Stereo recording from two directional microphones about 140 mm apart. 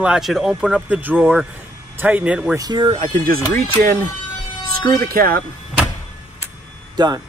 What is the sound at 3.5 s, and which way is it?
Speech, 90° right.